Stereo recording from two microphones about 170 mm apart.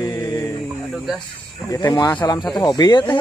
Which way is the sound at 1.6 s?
20° left (ahead or behind).